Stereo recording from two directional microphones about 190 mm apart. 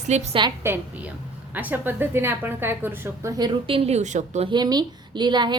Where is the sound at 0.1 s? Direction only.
35° right (ahead or behind).